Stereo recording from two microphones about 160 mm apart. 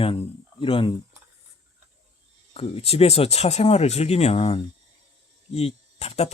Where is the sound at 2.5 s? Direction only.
35° left (ahead or behind).